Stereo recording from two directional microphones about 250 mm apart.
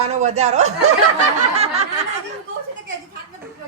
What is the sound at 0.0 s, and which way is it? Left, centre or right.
Speech, right.